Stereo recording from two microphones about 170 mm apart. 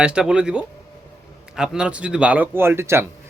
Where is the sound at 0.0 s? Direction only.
5° right (ahead or behind).